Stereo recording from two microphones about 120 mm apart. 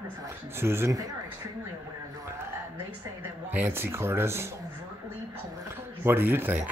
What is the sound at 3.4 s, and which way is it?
Speech, 15° right (ahead or behind).